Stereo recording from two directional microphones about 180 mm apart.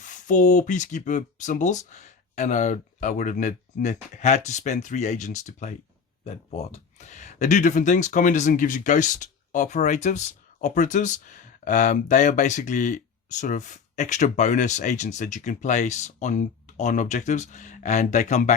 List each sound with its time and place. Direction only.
0.0 s speech: 45° left (ahead or behind)